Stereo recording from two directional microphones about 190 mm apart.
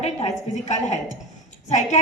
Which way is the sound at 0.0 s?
35° left (ahead or behind).